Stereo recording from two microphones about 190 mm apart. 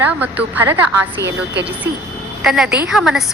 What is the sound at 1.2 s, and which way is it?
Speech, 65° right (ahead or behind).